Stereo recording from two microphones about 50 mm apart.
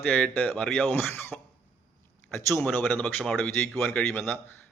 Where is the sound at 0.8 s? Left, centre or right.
Left.